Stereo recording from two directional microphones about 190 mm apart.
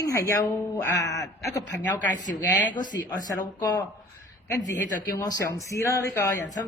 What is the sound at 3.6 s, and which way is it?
Speech, 20° left (ahead or behind).